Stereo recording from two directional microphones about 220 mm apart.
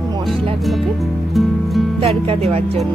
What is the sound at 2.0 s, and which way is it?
Speech, 25° right (ahead or behind).